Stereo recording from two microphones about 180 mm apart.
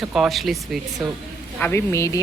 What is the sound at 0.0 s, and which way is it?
Speech, centre (ahead or behind).